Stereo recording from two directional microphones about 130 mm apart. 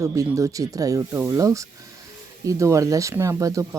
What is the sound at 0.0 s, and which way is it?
Speech, 25° right (ahead or behind).